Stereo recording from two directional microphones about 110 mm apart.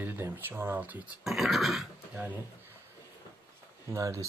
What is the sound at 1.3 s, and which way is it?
Speech, centre (ahead or behind).